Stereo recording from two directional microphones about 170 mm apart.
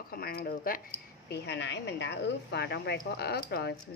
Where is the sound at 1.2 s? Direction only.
80° left.